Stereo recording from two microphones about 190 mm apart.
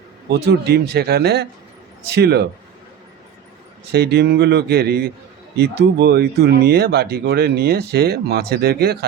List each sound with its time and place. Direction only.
0.3 s speech: 55° right (ahead or behind)
3.9 s speech: 55° right (ahead or behind)